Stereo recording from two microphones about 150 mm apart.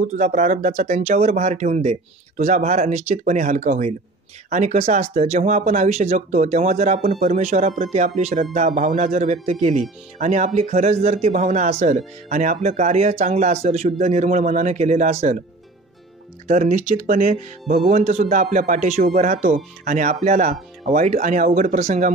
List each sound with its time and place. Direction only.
0.0 s speech: 55° right (ahead or behind)
16.4 s speech: 55° right (ahead or behind)